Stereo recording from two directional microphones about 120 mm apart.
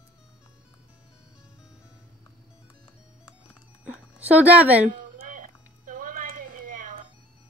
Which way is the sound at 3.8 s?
10° right (ahead or behind).